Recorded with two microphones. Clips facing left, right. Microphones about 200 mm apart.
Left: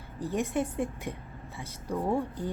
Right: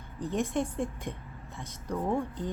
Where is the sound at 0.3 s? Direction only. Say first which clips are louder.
Left 1 dB; 10° left (ahead or behind).